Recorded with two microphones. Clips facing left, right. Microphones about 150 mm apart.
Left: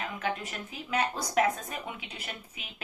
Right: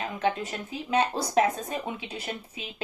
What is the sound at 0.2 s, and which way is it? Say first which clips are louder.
Speech: right 9 dB; 30° right (ahead or behind).